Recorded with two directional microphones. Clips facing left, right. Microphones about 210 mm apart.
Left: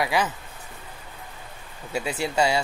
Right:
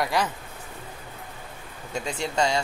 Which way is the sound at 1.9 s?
5° left (ahead or behind).